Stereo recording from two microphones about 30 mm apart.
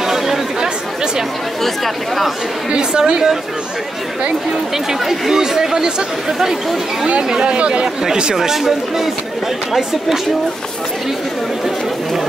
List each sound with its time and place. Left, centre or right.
0.0 s chatter: centre
2.7 s a woman's voice: right
5.3 s speech: centre
7.2 s speech: right
7.5 s a woman's voice: right
8.4 s speech: centre